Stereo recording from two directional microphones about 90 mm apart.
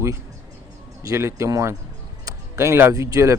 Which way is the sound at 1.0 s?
30° right (ahead or behind).